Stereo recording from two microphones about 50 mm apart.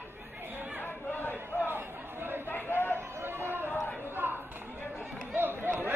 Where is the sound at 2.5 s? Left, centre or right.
Left.